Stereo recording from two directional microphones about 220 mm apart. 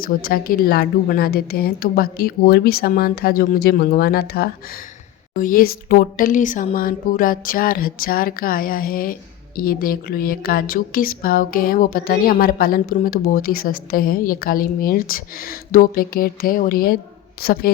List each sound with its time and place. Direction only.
0.0 s a woman's voice: 40° left (ahead or behind)